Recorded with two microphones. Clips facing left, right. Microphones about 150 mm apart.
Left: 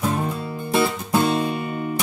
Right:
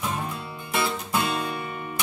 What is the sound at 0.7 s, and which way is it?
Music, 35° left (ahead or behind).